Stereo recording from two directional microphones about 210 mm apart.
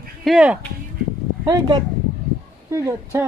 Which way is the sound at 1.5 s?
20° right (ahead or behind).